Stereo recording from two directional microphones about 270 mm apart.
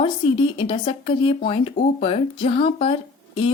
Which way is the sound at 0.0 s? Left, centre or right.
Centre.